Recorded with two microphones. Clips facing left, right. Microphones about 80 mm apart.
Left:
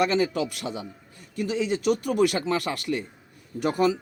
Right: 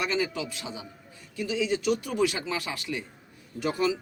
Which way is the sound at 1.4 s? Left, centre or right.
Left.